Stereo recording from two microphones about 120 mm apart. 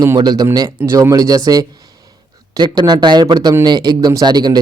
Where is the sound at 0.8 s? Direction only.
25° right (ahead or behind).